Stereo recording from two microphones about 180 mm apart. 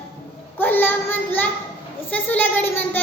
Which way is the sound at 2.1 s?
10° left (ahead or behind).